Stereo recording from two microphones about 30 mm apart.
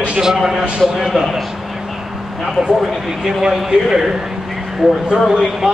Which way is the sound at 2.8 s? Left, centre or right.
Centre.